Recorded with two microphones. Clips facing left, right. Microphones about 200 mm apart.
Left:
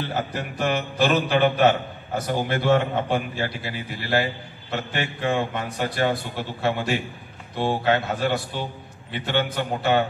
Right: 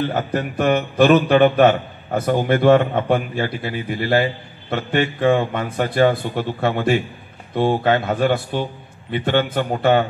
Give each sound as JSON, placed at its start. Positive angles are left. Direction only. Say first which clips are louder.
{"t": 0.3, "sound": "a man's voice", "louder": "right 7 dB", "side_deg": -55}